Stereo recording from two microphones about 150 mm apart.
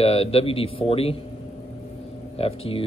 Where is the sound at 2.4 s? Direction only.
40° left (ahead or behind).